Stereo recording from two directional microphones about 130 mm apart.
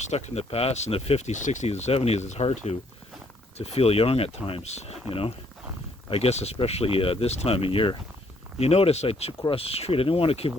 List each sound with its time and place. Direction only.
0.1 s speech: 55° left (ahead or behind)
6.1 s speech: 50° left (ahead or behind)